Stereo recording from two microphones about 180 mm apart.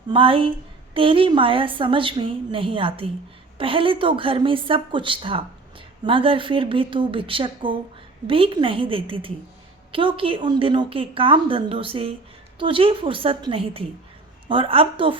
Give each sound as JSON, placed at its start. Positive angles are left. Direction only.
{"t": 0.1, "sound": "a woman's voice", "side_deg": -30}